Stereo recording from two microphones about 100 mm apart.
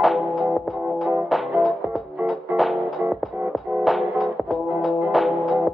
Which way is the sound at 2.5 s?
Centre (ahead or behind).